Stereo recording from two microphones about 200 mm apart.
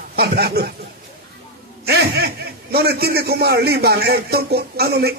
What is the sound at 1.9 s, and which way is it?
A man's voice, 50° right (ahead or behind).